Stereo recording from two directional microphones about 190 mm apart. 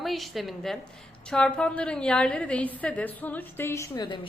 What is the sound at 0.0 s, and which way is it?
A woman's voice, centre (ahead or behind).